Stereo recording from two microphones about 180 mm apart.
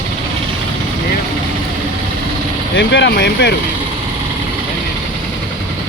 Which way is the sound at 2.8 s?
85° left.